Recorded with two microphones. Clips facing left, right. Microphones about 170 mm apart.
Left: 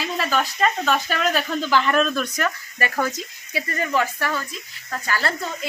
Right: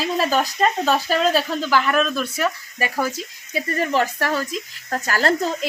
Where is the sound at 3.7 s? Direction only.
30° right (ahead or behind).